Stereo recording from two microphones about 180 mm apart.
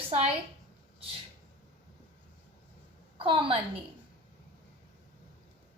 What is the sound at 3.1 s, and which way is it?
Speech, 30° right (ahead or behind).